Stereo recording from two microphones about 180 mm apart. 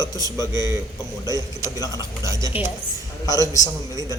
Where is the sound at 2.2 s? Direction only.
15° right (ahead or behind).